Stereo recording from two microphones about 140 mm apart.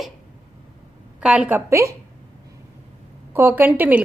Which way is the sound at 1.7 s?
20° right (ahead or behind).